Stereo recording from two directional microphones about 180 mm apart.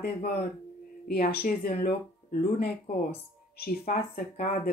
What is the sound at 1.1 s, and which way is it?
Speech, 55° left (ahead or behind).